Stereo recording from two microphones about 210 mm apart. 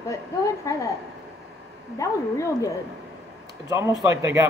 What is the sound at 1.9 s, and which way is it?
Speech, 15° left (ahead or behind).